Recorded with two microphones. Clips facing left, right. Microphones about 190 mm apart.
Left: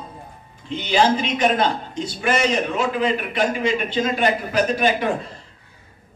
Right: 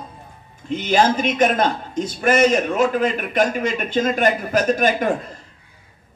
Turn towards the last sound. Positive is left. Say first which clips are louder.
# right 1 dB
turn(degrees=-45)  # may be behind; listen again after turning